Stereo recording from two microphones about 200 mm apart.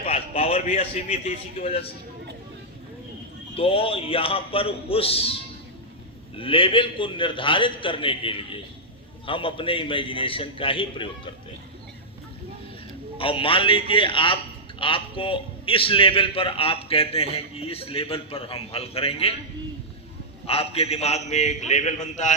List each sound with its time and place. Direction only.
0.0 s a man's voice: 30° left (ahead or behind)
3.5 s a man's voice: 30° left (ahead or behind)
13.1 s a man's voice: 25° left (ahead or behind)
20.5 s a man's voice: 30° left (ahead or behind)